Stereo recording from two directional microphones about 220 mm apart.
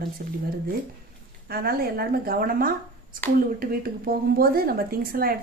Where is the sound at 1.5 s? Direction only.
45° right (ahead or behind).